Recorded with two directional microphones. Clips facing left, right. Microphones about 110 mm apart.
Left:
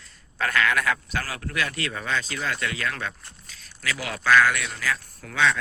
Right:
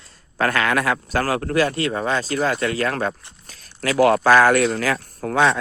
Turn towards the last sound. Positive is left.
turn(degrees=-45)  # may be behind; listen again after turning